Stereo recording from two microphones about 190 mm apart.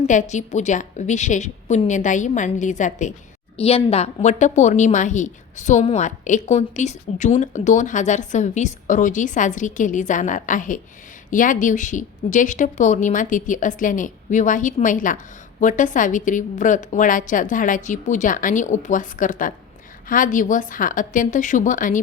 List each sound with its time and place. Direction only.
0.1 s a woman's voice: 40° left (ahead or behind)